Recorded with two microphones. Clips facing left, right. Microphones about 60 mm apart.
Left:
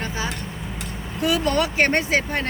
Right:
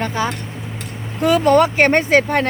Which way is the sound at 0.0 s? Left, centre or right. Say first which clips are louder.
Right 7 dB; right.